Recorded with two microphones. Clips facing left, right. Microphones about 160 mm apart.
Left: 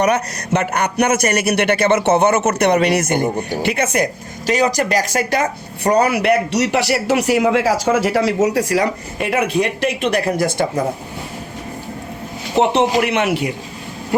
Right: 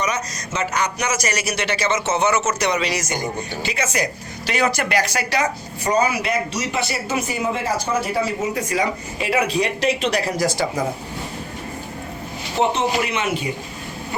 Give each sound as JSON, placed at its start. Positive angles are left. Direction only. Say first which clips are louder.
{"t": 0.0, "sound": "a woman's voice", "louder": "left 8 dB", "side_deg": 60}
{"t": 12.5, "sound": "a man's voice", "louder": "left 5 dB", "side_deg": 65}